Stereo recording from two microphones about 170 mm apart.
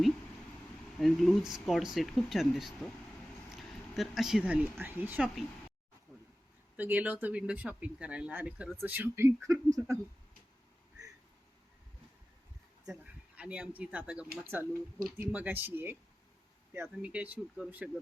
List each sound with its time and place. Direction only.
0.9 s speech: centre (ahead or behind)
6.7 s speech: 10° right (ahead or behind)
12.9 s speech: 5° right (ahead or behind)